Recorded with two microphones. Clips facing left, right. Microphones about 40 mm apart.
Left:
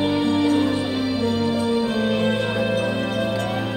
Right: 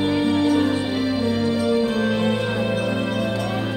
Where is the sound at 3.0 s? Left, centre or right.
Left.